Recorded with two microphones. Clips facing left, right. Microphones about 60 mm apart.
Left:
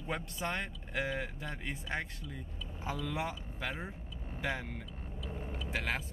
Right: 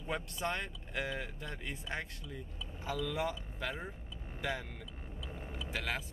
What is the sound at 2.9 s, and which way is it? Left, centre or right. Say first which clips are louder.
Speech: right 1 dB; left.